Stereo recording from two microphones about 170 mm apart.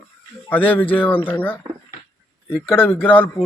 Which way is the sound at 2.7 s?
10° left (ahead or behind).